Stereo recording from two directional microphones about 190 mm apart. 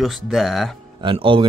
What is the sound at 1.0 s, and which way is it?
Speech, 25° right (ahead or behind).